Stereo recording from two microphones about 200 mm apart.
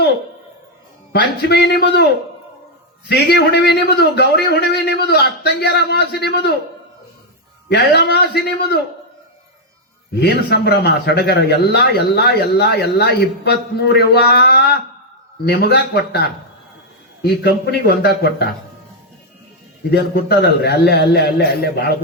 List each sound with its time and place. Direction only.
1.1 s speech: 55° left (ahead or behind)
3.1 s speech: 60° left (ahead or behind)
7.7 s speech: 55° left (ahead or behind)
10.2 s a man's voice: 55° left (ahead or behind)
17.2 s a man's voice: 55° left (ahead or behind)
19.9 s speech: 55° left (ahead or behind)